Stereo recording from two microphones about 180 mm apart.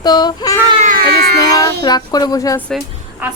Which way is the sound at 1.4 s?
20° left (ahead or behind).